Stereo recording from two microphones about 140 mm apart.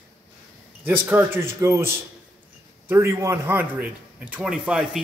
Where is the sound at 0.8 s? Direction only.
15° right (ahead or behind).